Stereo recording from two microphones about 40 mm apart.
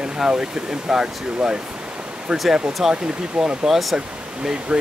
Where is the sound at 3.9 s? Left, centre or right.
Right.